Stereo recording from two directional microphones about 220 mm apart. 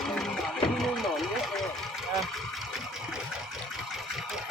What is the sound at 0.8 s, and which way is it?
Vehicle, centre (ahead or behind).